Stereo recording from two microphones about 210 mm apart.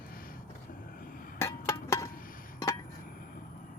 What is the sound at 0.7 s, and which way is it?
Vehicle, 40° left (ahead or behind).